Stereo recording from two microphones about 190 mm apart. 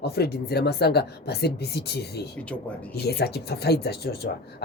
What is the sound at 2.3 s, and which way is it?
Speech, 5° left (ahead or behind).